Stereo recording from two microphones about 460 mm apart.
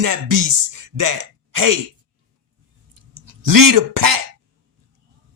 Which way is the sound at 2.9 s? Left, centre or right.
Right.